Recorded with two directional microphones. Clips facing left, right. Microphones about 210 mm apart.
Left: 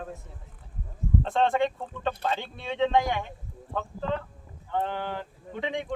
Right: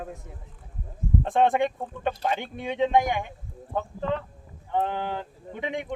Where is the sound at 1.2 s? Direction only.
15° right (ahead or behind).